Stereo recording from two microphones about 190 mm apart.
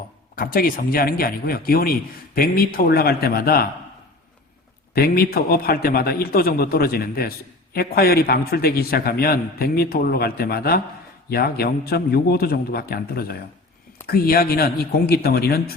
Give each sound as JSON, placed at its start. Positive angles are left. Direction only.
{"t": 0.3, "sound": "a man's voice", "side_deg": 50}
{"t": 4.9, "sound": "a man's voice", "side_deg": 55}